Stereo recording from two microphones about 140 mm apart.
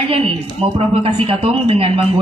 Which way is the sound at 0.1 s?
40° right (ahead or behind).